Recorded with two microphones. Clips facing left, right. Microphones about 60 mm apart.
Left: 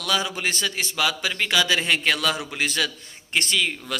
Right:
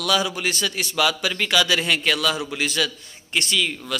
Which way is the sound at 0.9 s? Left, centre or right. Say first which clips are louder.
Right 4 dB; centre.